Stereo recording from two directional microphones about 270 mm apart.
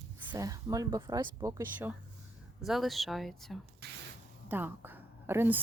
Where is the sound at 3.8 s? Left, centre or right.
Right.